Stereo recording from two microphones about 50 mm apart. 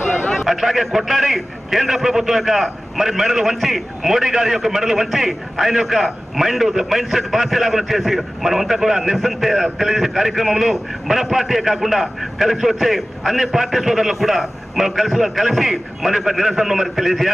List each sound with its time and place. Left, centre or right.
0.5 s a man's voice: centre